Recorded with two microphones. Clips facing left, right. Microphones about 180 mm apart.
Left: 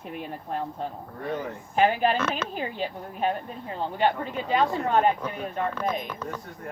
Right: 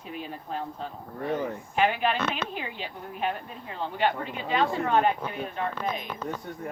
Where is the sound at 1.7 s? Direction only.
40° left (ahead or behind).